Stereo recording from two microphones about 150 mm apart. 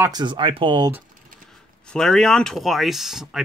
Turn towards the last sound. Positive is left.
turn(degrees=-5)  # may be behind; listen again after turning